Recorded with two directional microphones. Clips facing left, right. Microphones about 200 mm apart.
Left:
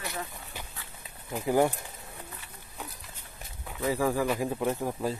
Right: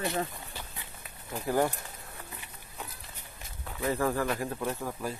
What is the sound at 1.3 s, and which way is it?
Speech, 15° left (ahead or behind).